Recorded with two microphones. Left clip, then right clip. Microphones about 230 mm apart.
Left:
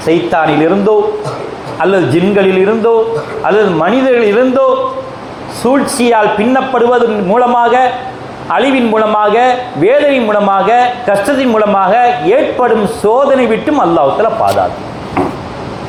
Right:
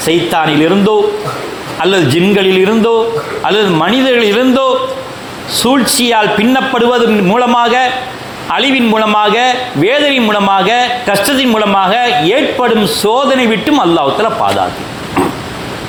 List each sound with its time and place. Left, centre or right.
0.0 s a man's voice: right
5.8 s a man's voice: right